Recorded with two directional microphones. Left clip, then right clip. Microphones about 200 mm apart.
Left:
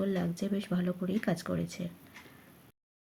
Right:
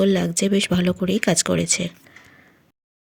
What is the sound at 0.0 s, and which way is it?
Speech, 45° right (ahead or behind).